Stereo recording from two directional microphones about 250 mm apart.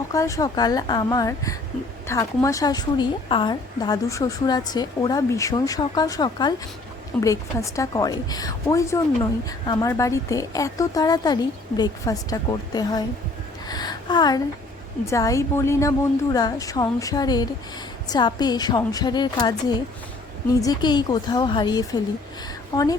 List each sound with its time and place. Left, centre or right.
0.1 s a woman's voice: centre
13.7 s a sound: centre
15.1 s a woman's voice: centre